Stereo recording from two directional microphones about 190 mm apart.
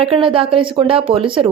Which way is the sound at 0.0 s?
30° right (ahead or behind).